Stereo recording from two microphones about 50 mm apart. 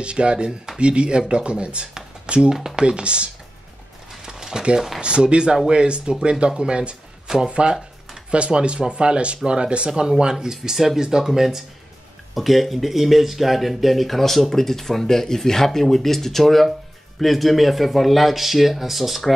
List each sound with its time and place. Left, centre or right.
0.0 s speech: right
4.2 s a sound: centre
4.7 s speech: centre
5.0 s speech: centre